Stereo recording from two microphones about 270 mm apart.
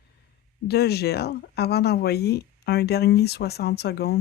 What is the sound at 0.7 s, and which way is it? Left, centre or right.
Speech, left.